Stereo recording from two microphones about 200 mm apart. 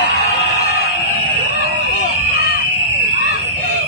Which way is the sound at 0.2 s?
50° left (ahead or behind).